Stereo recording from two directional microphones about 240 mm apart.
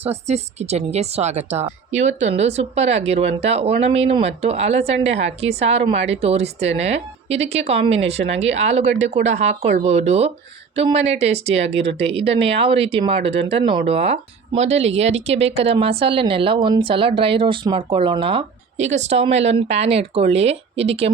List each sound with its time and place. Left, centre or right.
0.0 s speech: right